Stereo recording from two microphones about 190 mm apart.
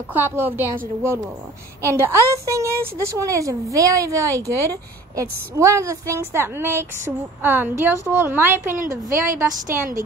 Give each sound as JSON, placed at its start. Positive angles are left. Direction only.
{"t": 0.1, "sound": "a woman's voice", "side_deg": -10}
{"t": 9.7, "sound": "a woman's voice", "side_deg": -45}